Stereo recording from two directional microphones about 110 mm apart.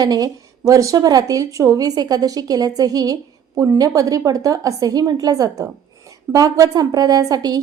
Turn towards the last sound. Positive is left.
turn(degrees=-35)  # may be behind; listen again after turning